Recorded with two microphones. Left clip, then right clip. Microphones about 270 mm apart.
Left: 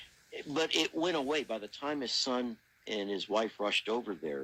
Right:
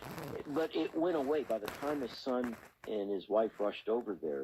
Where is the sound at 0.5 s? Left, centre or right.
Left.